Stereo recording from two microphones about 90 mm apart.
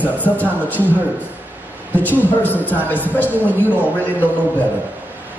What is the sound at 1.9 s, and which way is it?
A man's voice, 20° left (ahead or behind).